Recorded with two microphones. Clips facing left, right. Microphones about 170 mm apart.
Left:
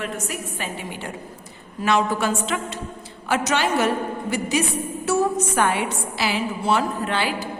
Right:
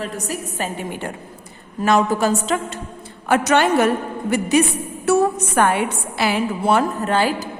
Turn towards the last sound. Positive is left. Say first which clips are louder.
# right 5 dB
turn(degrees=-45)  # may be behind; listen again after turning